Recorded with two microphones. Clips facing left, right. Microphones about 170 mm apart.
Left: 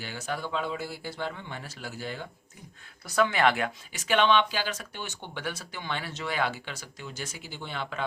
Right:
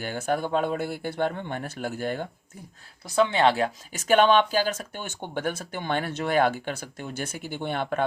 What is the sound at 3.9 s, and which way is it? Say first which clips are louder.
Speech: right 5 dB; 45° right (ahead or behind).